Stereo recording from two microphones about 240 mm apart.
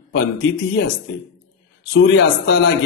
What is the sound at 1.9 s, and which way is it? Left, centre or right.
Speech, left.